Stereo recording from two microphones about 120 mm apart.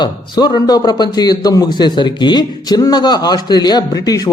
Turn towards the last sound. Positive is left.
turn(degrees=35)  # may be behind; listen again after turning